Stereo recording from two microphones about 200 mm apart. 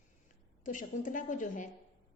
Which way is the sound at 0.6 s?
40° left (ahead or behind).